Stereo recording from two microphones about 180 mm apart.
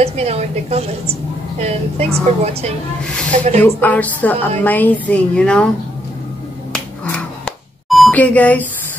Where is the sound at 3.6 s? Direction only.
10° left (ahead or behind).